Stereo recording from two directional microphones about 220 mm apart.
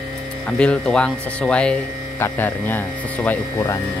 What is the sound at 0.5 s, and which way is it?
Speech, 5° left (ahead or behind).